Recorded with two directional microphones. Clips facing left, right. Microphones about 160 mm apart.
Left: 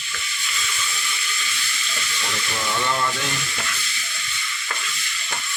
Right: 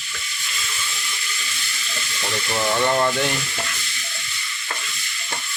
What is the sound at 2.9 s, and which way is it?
Speech, 45° right (ahead or behind).